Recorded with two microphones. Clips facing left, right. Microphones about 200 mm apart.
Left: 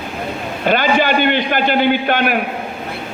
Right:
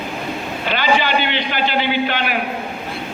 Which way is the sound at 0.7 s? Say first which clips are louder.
Left 4 dB; 50° left (ahead or behind).